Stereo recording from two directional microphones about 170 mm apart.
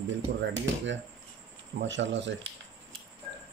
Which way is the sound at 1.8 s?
90° right.